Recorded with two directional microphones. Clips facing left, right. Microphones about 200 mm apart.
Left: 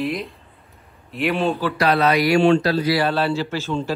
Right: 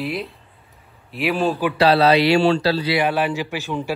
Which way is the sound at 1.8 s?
30° right (ahead or behind).